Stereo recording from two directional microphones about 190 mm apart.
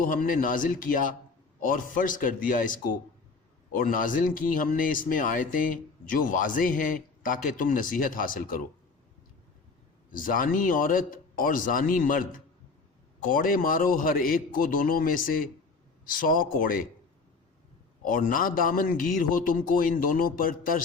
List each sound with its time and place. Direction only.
0.0 s a man's voice: 45° left (ahead or behind)
10.1 s a man's voice: 45° left (ahead or behind)
13.2 s a man's voice: 45° left (ahead or behind)
18.0 s a man's voice: 45° left (ahead or behind)